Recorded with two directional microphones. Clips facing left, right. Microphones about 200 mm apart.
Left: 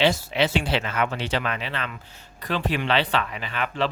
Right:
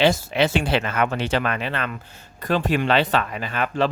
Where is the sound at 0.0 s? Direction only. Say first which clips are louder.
Right 3 dB; 45° right (ahead or behind).